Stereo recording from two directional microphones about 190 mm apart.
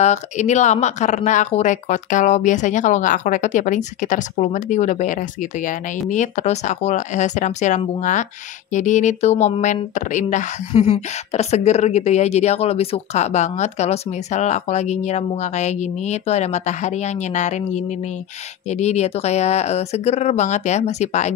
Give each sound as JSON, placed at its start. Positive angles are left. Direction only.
{"t": 0.0, "sound": "speech", "side_deg": 40}